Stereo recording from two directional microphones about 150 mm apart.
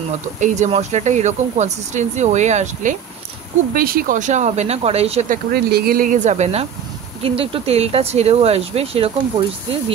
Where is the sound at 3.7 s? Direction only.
75° right (ahead or behind); by 5.3 s 45° right (ahead or behind).